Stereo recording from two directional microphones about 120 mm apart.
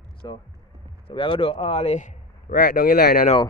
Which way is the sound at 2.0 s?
90° left.